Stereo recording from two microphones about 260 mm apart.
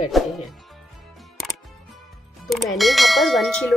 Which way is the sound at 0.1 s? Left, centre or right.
Centre.